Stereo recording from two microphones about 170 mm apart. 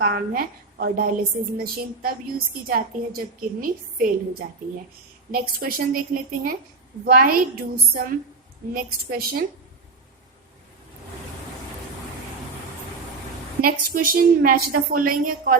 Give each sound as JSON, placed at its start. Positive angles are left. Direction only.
{"t": 0.0, "sound": "a woman's voice", "side_deg": -60}
{"t": 13.6, "sound": "a woman's voice", "side_deg": -60}